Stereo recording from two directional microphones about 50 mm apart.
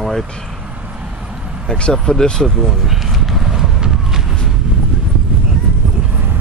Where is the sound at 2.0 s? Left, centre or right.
Centre.